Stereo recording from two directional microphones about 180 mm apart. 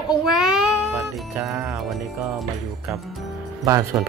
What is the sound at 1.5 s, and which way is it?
Speech, 15° right (ahead or behind).